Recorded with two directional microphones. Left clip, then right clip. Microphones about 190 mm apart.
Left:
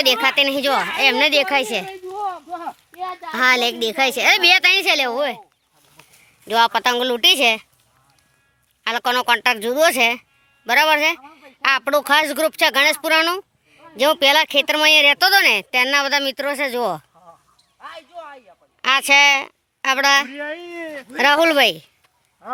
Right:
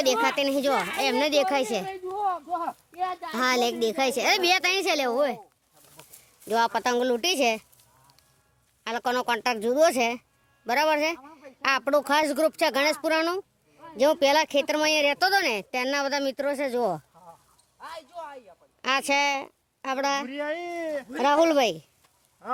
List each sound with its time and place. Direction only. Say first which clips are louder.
0.0 s speech: left 7 dB; centre (ahead or behind)
2.0 s a sound: left 1 dB; 15° right (ahead or behind)
3.3 s a woman's voice: left 9 dB; 5° right (ahead or behind)
6.5 s speech: left 7 dB; centre (ahead or behind)
8.8 s speech: left 8 dB; centre (ahead or behind)
17.7 s a sound: left 3 dB; 45° right (ahead or behind)
18.8 s speech: left 10 dB; 5° right (ahead or behind)
20.3 s speech: left 2 dB; 55° right (ahead or behind)
21.2 s speech: left 7 dB; centre (ahead or behind)